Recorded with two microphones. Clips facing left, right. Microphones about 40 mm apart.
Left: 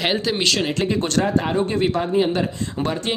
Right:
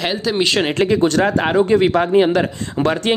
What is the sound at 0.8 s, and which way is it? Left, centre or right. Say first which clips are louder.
Speech: right 9 dB; right.